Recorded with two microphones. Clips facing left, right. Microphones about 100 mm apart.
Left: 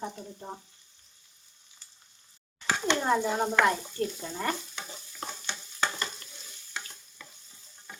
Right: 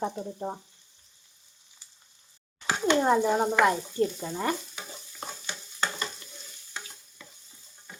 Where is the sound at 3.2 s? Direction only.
10° right (ahead or behind).